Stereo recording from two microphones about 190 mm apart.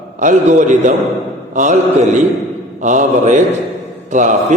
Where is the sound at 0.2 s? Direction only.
40° right (ahead or behind).